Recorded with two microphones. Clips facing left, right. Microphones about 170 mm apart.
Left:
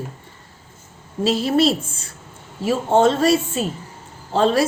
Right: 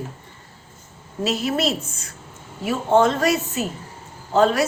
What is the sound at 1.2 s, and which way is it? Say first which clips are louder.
Speech: left 5 dB; 30° left (ahead or behind).